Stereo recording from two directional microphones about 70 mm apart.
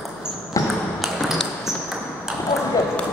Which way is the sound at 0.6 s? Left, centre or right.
Left.